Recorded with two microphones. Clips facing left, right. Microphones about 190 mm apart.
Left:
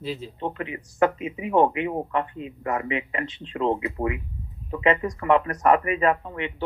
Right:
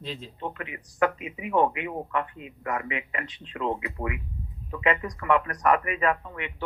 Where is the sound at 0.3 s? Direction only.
30° left (ahead or behind).